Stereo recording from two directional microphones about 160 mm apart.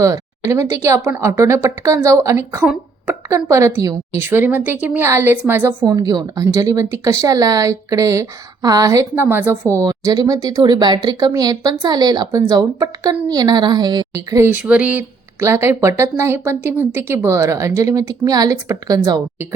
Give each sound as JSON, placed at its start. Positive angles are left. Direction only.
{"t": 0.0, "sound": "speech", "side_deg": -20}